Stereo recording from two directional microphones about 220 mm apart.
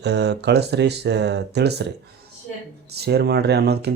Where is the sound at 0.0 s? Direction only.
50° right (ahead or behind).